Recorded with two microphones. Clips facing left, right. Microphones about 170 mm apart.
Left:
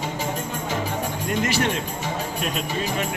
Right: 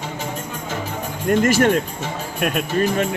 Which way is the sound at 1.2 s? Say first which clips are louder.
Right 9 dB; 50° right (ahead or behind).